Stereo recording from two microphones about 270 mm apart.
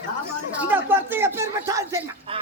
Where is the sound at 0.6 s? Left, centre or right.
Centre.